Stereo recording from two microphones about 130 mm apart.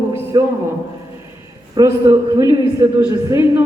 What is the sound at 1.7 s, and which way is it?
A man's voice, 25° right (ahead or behind).